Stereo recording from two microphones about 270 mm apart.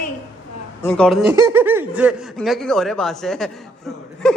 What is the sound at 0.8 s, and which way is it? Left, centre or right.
Speech, centre.